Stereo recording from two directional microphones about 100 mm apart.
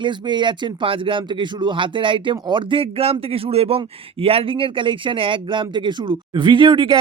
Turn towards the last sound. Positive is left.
turn(degrees=-55)  # may be behind; listen again after turning